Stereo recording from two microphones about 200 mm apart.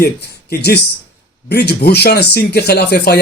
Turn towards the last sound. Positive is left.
turn(degrees=55)  # may be behind; listen again after turning